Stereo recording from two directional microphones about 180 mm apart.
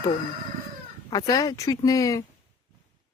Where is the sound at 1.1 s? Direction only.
20° left (ahead or behind).